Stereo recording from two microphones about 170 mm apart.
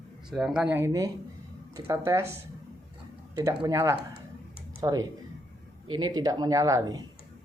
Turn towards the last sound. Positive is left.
turn(degrees=-20)  # may be behind; listen again after turning